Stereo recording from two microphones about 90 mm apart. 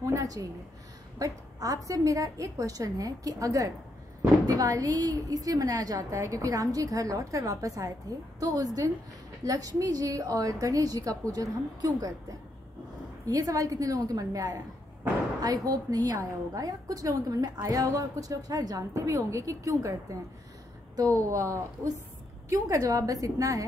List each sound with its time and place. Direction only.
0.0 s a woman's voice: 40° right (ahead or behind)